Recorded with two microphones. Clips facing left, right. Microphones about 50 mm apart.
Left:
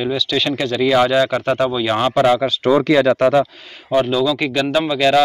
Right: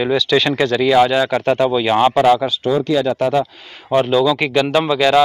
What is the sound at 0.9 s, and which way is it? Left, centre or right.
Speech, centre.